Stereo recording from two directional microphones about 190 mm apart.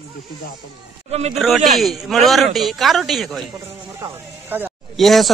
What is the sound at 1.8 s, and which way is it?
A man's voice, centre (ahead or behind).